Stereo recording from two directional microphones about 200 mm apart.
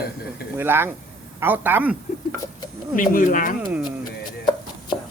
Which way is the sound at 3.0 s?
40° left (ahead or behind).